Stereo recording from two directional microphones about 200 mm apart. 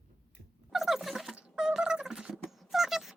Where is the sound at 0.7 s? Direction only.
Centre (ahead or behind).